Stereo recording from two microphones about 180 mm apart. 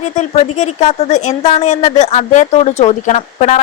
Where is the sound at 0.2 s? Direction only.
35° left (ahead or behind).